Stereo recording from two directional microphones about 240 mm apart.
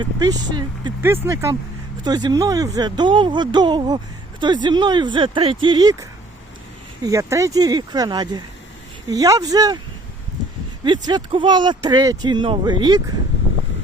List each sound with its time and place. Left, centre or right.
0.0 s speech: centre
10.8 s speech: centre